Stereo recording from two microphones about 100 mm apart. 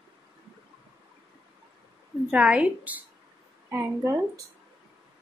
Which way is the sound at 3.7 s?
30° right (ahead or behind).